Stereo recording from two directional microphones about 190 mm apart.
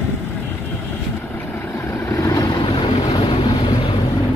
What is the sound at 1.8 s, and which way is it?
Vehicle, 15° left (ahead or behind).